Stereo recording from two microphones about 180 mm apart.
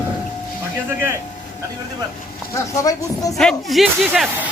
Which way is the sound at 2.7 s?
20° left (ahead or behind).